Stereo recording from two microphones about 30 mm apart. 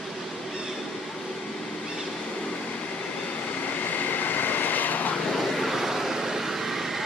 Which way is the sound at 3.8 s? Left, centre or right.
Left.